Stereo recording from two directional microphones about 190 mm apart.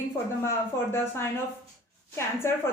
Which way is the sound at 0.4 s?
10° left (ahead or behind).